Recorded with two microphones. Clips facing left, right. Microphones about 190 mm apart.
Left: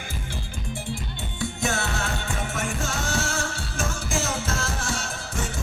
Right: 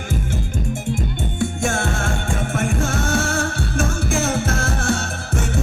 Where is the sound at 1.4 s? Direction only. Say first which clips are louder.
Right 5 dB; 50° right (ahead or behind).